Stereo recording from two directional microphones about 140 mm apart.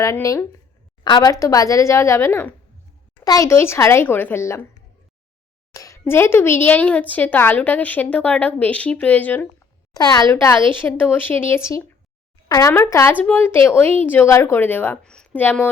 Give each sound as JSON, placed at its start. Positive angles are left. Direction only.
{"t": 0.0, "sound": "a woman's voice", "side_deg": 20}
{"t": 5.7, "sound": "a woman's voice", "side_deg": 25}
{"t": 9.9, "sound": "a woman's voice", "side_deg": 30}
{"t": 10.8, "sound": "a woman's voice", "side_deg": 15}